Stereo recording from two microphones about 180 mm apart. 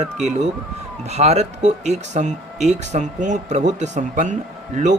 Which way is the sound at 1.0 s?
35° right (ahead or behind).